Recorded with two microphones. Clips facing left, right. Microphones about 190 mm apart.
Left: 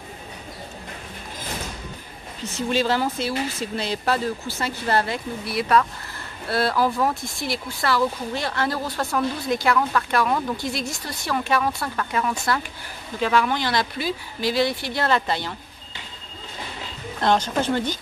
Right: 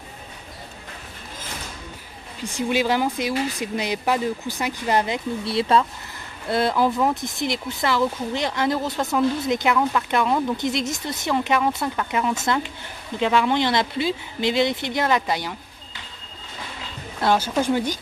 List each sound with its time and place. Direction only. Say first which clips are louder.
2.4 s speech: right 1 dB; 15° right (ahead or behind)
17.2 s speech: right 1 dB; 10° right (ahead or behind)